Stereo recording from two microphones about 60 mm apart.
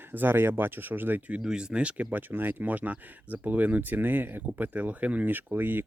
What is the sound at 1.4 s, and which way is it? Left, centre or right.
Speech, centre.